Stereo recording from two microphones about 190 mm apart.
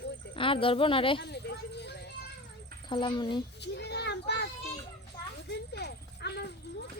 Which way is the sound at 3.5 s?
60° left (ahead or behind).